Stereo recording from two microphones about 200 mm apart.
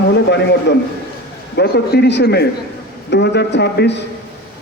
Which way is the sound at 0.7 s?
60° left (ahead or behind).